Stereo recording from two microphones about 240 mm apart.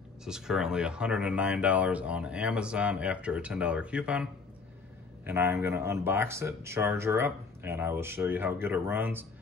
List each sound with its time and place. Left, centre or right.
0.2 s speech: centre